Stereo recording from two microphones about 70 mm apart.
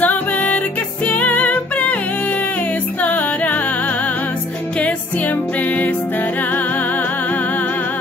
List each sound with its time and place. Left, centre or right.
0.0 s music: left
3.0 s music: left